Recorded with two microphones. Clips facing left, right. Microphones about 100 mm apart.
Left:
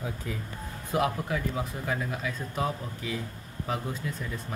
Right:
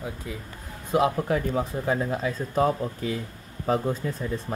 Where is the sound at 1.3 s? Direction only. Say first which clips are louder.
Right 6 dB; 35° right (ahead or behind).